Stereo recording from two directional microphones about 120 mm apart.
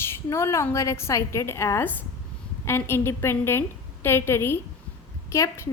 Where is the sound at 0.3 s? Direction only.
25° left (ahead or behind).